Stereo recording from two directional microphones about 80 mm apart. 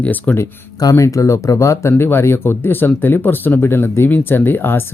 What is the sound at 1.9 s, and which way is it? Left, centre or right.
Speech, left.